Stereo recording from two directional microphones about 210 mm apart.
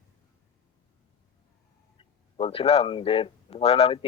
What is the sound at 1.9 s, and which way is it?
Speech, 25° left (ahead or behind).